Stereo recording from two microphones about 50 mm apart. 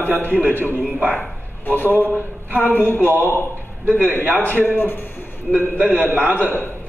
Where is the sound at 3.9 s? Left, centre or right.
Right.